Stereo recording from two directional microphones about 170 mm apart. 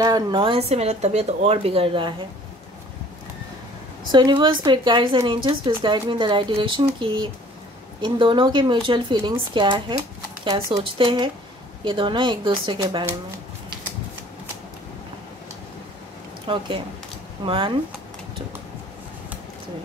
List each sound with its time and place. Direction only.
0.0 s speech: 25° right (ahead or behind)
4.1 s speech: 25° right (ahead or behind)
16.5 s speech: 30° right (ahead or behind)